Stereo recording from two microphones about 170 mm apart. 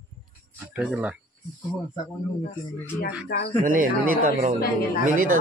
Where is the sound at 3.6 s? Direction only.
55° right (ahead or behind).